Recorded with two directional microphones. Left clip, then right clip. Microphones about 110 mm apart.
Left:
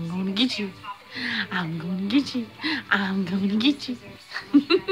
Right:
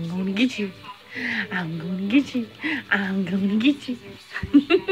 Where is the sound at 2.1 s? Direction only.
15° left (ahead or behind).